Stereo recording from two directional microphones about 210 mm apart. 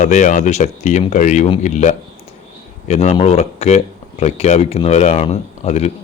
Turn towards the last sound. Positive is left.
turn(degrees=30)  # may be behind; listen again after turning